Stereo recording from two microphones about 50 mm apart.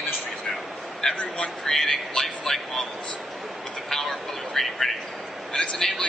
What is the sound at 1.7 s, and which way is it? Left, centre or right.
Speech, centre.